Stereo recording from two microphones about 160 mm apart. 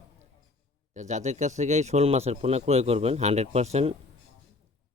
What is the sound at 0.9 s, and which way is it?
Speech, 45° right (ahead or behind).